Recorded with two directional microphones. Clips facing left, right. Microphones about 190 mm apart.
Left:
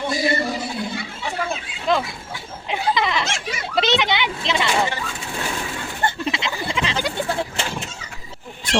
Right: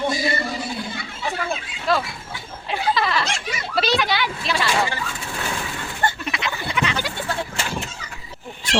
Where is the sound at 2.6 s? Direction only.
20° left (ahead or behind).